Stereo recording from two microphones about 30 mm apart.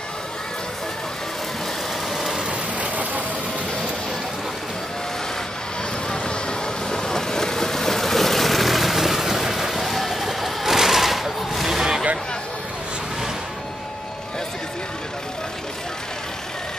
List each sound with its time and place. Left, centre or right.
2.8 s vehicle: right
6.9 s vehicle: left; by 11.8 s centre
11.8 s a sound: right